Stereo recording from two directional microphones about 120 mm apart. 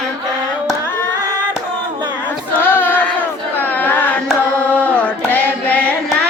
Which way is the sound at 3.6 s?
15° left (ahead or behind).